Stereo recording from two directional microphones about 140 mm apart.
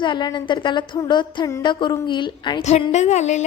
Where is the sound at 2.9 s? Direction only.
55° left (ahead or behind).